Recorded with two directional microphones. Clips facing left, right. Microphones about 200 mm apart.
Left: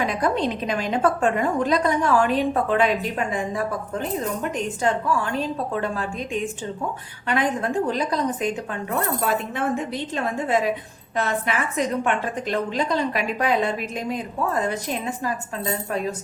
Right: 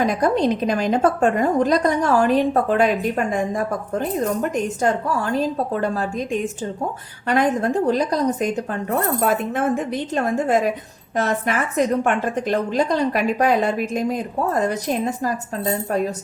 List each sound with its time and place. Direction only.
0.0 s a woman's voice: 40° right (ahead or behind)